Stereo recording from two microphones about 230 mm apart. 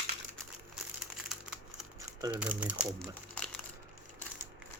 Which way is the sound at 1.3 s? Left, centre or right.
Centre.